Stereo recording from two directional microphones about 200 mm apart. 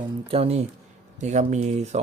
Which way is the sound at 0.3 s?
30° right (ahead or behind).